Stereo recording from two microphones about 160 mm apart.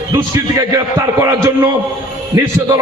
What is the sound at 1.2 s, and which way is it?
A man's voice, 15° right (ahead or behind).